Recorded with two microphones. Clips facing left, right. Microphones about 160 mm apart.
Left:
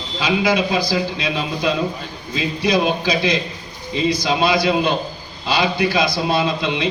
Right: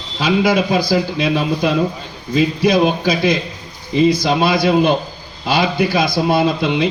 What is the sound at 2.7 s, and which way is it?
A man's voice, 50° right (ahead or behind).